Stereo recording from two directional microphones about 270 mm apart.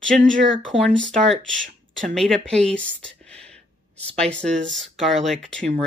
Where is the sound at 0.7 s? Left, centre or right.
Centre.